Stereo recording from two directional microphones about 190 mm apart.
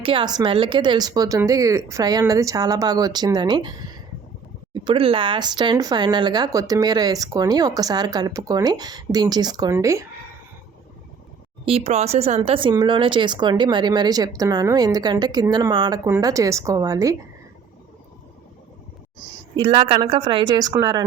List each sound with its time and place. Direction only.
0.0 s speech: 25° right (ahead or behind)
11.6 s speech: 30° right (ahead or behind)
19.2 s speech: 25° right (ahead or behind)